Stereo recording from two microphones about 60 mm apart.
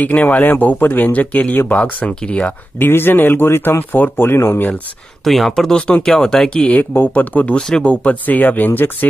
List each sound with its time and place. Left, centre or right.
0.0 s speech: left
2.8 s speech: left
5.2 s speech: centre; by 7.5 s left
7.5 s speech: centre; by 8.9 s left